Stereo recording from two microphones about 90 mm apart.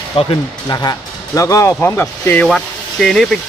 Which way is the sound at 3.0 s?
Centre (ahead or behind).